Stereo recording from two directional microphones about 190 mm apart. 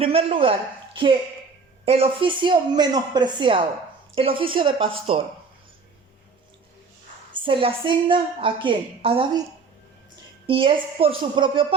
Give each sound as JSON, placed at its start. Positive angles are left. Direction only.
{"t": 0.0, "sound": "a woman's voice", "side_deg": -30}
{"t": 7.3, "sound": "a woman's voice", "side_deg": -25}
{"t": 10.4, "sound": "a woman's voice", "side_deg": -30}